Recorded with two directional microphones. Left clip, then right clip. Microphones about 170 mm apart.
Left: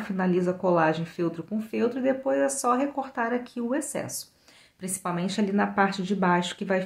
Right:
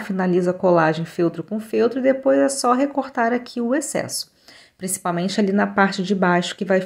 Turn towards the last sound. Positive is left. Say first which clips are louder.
# right 6 dB
turn(degrees=-25)  # may be behind; listen again after turning